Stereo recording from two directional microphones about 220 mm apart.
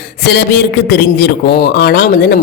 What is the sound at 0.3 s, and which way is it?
Speech, 50° left (ahead or behind).